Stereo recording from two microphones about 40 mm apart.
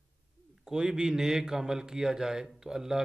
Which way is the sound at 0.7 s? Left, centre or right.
Centre.